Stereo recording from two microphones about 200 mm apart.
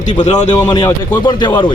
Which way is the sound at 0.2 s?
35° left (ahead or behind).